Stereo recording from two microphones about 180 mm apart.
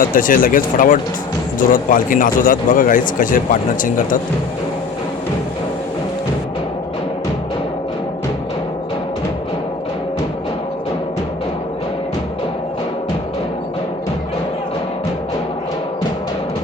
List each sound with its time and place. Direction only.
0.0 s speech: 50° left (ahead or behind)